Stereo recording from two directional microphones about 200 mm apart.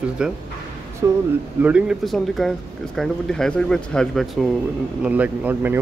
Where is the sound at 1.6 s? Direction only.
5° right (ahead or behind).